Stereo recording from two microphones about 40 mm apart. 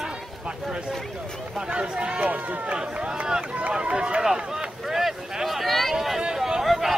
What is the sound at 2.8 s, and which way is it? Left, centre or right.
Speech, centre.